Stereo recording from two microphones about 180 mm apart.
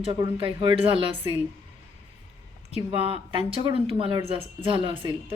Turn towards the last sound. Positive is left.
turn(degrees=-30)  # may be behind; listen again after turning